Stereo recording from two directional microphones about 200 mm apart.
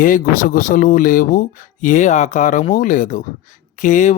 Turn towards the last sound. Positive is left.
turn(degrees=40)  # may be behind; listen again after turning